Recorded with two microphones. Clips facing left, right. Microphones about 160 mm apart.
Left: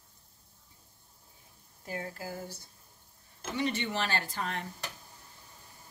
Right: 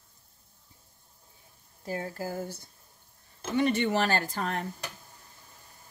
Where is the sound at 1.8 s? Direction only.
35° right (ahead or behind).